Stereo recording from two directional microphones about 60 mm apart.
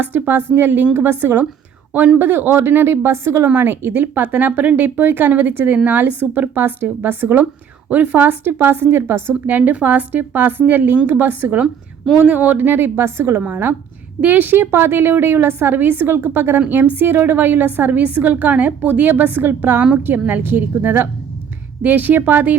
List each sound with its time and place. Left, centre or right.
0.0 s a woman's voice: right
9.6 s a woman's voice: right
13.4 s a woman's voice: right
19.8 s a woman's voice: right